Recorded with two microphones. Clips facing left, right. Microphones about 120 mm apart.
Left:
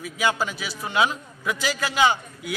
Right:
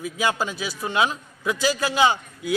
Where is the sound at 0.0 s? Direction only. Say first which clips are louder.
Even; 25° right (ahead or behind).